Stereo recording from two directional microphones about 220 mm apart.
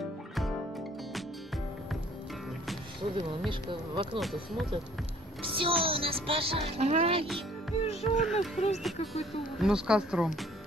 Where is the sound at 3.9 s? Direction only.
20° right (ahead or behind).